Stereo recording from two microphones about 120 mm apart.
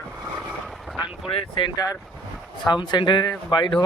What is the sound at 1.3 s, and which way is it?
Speech, 40° left (ahead or behind).